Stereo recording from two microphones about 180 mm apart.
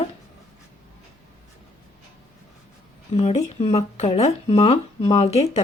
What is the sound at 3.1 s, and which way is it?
Speech, 35° left (ahead or behind).